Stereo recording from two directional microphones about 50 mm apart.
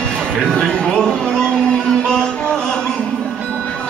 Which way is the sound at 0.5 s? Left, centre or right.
Centre.